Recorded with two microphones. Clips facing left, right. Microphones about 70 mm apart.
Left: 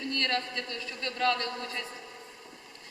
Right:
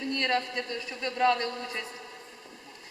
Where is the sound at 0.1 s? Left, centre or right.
Centre.